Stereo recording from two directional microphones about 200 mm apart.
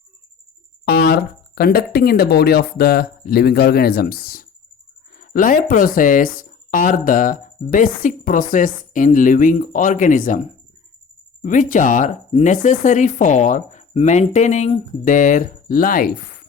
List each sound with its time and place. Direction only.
0.9 s speech: 50° left (ahead or behind)